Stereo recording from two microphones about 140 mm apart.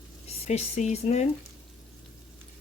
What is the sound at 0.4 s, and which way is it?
Speech, 50° left (ahead or behind).